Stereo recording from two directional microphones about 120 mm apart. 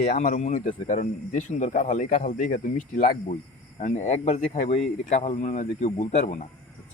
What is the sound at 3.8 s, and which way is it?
Speech, 70° left (ahead or behind).